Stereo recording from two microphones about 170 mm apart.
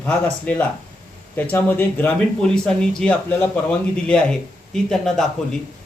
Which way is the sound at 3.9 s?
5° left (ahead or behind).